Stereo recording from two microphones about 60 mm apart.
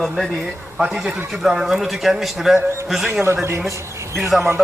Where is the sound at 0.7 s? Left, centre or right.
Centre.